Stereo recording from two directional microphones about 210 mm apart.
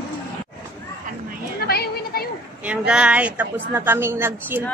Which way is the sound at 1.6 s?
45° left (ahead or behind).